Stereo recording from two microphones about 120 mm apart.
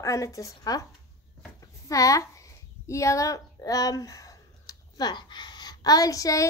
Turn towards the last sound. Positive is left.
turn(degrees=30)  # may be behind; listen again after turning